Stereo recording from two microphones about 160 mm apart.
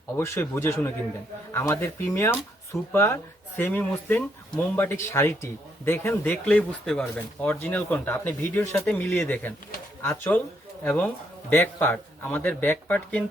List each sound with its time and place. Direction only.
0.2 s speech: 15° left (ahead or behind)